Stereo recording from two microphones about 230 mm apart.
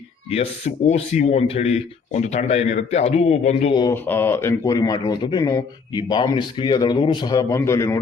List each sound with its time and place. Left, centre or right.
0.3 s speech: left